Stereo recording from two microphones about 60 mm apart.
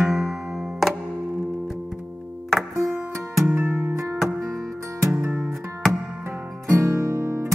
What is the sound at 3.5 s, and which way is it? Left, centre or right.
Music, right.